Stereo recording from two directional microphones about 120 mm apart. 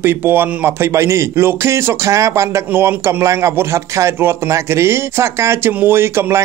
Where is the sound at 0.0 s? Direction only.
20° right (ahead or behind).